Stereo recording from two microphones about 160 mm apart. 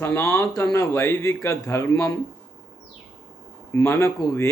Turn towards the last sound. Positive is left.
turn(degrees=15)  # may be behind; listen again after turning